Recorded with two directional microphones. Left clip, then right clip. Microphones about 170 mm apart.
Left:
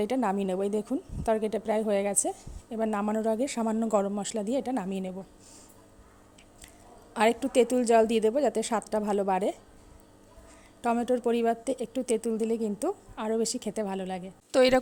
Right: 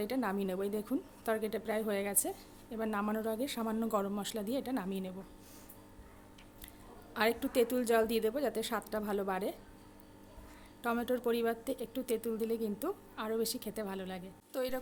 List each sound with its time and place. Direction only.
0.0 s a woman's voice: 35° left (ahead or behind)
7.1 s a woman's voice: 35° left (ahead or behind)
10.8 s a woman's voice: 30° left (ahead or behind)
14.5 s a woman's voice: 50° left (ahead or behind)